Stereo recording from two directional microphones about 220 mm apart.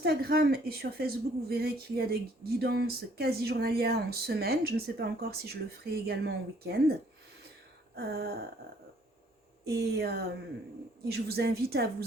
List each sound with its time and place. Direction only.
0.0 s a woman's voice: 45° right (ahead or behind)
7.9 s a woman's voice: 45° right (ahead or behind)
9.6 s a woman's voice: 45° right (ahead or behind)